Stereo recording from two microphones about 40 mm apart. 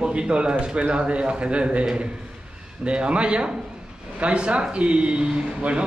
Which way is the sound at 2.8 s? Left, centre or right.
Right.